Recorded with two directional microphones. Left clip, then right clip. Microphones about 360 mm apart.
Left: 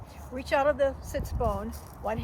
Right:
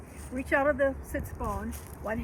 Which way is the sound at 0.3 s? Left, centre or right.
Centre.